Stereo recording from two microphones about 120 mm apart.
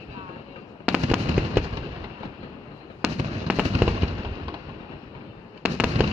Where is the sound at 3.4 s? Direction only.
10° right (ahead or behind).